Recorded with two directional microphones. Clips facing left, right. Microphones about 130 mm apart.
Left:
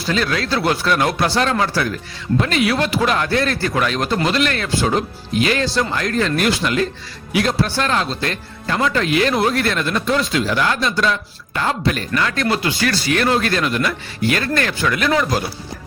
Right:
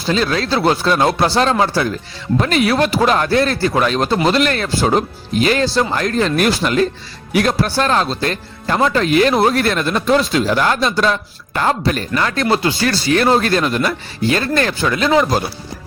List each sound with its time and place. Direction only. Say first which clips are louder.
0.0 s speech: right 3 dB; 30° right (ahead or behind)
2.4 s speech: right 4 dB; 40° right (ahead or behind)
7.3 s speech: right 2 dB; 55° right (ahead or behind)
7.8 s speech: right 4 dB; 35° right (ahead or behind)